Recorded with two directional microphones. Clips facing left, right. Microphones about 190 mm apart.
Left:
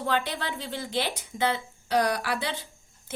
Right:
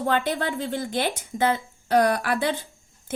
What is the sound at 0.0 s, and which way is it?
Speech, 50° right (ahead or behind).